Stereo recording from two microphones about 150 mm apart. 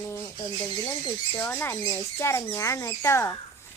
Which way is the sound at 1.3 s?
15° left (ahead or behind).